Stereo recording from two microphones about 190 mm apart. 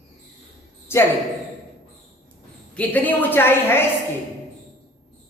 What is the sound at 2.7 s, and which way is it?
A man's voice, 10° left (ahead or behind).